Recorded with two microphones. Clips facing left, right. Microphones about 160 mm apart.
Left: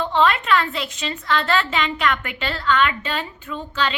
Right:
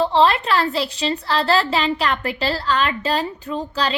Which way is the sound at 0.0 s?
35° right (ahead or behind).